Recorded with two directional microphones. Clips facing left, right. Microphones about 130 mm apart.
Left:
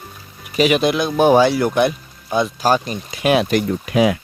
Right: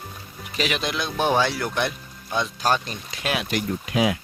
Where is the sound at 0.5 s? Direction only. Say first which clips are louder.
Left 11 dB; 10° left (ahead or behind).